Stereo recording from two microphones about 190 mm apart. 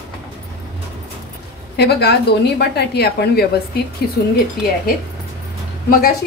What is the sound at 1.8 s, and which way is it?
A woman's voice, 60° left (ahead or behind).